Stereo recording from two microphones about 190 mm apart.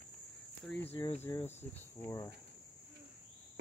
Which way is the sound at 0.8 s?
30° left (ahead or behind).